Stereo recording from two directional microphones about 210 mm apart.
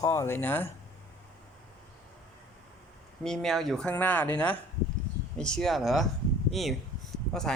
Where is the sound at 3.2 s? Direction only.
Centre (ahead or behind).